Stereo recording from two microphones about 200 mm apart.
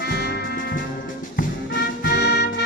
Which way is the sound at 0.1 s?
55° left (ahead or behind).